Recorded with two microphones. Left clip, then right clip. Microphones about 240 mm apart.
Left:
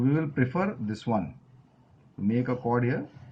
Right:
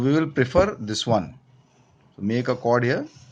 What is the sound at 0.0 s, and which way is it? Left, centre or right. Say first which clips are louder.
Speech: right 6 dB; right.